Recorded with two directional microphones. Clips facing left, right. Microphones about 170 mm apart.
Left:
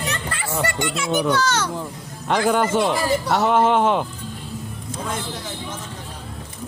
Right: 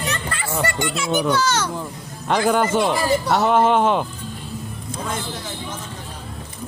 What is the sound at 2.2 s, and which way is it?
A man's voice, 20° right (ahead or behind).